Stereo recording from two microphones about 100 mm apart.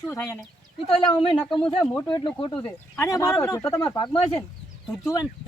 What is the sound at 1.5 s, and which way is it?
Speech, 60° left (ahead or behind).